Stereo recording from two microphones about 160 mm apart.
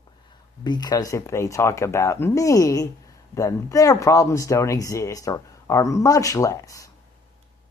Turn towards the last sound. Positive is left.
turn(degrees=20)  # may be behind; listen again after turning